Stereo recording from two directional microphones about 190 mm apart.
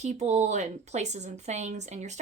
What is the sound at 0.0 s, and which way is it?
A woman's voice, 35° right (ahead or behind).